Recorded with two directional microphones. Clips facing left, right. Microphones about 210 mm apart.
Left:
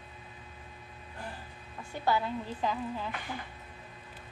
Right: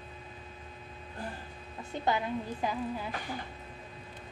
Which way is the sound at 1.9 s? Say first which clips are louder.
Even; 20° right (ahead or behind).